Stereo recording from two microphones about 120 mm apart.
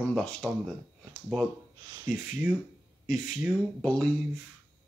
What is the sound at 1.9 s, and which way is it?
Speech, 25° right (ahead or behind).